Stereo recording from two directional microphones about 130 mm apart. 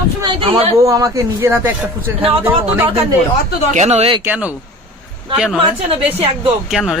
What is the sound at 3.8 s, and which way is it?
Speech, 60° right (ahead or behind).